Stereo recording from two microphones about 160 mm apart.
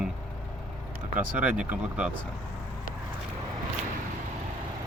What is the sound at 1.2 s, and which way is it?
Speech, 10° right (ahead or behind).